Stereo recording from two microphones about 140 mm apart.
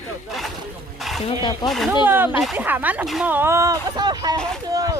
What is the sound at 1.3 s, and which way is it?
Speech, 35° left (ahead or behind).